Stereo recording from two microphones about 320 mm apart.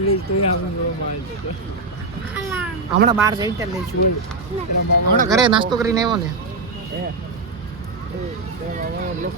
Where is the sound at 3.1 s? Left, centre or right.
Centre.